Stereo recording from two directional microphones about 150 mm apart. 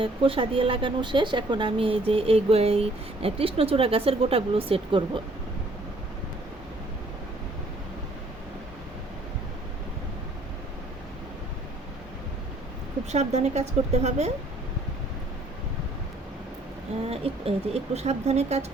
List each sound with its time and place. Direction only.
0.0 s a woman's voice: 35° right (ahead or behind)
13.1 s speech: 45° right (ahead or behind)
17.1 s speech: 40° right (ahead or behind)